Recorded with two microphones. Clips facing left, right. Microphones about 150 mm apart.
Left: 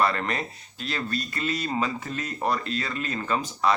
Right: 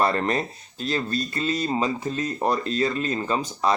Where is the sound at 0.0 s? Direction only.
35° right (ahead or behind).